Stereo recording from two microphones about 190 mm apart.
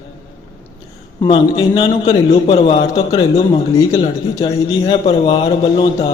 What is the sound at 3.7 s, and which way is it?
A man's voice, 20° left (ahead or behind).